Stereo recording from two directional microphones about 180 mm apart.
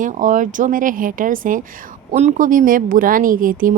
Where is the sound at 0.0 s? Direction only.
45° right (ahead or behind).